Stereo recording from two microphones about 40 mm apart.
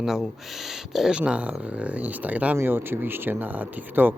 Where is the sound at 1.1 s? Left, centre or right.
Right.